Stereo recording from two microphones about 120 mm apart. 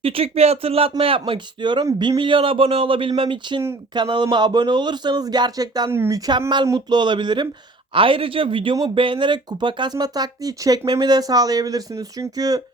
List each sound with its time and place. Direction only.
0.0 s speech: 50° right (ahead or behind); by 5.9 s 35° right (ahead or behind)
5.9 s speech: 25° right (ahead or behind)